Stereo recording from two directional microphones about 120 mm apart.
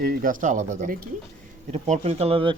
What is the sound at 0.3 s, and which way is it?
Speech, 90° right.